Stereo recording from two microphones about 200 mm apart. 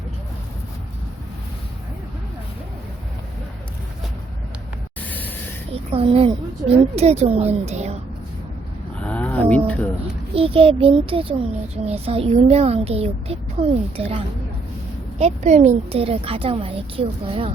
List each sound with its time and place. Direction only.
5.0 s vehicle: 10° left (ahead or behind)
5.7 s a woman's voice: 30° right (ahead or behind)
9.0 s a sound: 5° left (ahead or behind)
10.3 s a child's voice: 30° right (ahead or behind)